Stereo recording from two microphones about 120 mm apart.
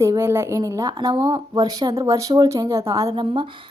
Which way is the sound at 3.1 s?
45° right (ahead or behind).